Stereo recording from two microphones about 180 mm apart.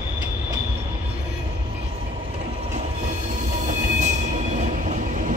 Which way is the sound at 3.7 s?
40° right (ahead or behind).